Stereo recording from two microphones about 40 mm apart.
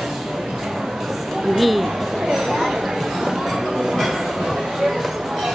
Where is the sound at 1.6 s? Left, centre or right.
Centre.